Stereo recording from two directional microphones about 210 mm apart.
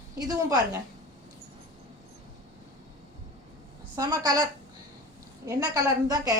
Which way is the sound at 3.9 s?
20° right (ahead or behind).